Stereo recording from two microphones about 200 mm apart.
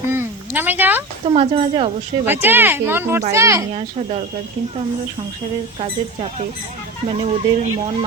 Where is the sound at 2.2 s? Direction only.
10° right (ahead or behind).